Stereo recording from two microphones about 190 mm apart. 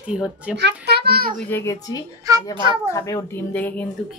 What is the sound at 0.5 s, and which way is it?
Speech, 60° right (ahead or behind).